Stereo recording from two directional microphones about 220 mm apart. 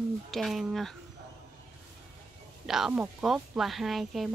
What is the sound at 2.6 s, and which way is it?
Speech, centre (ahead or behind).